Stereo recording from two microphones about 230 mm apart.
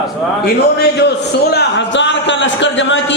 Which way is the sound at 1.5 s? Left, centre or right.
Left.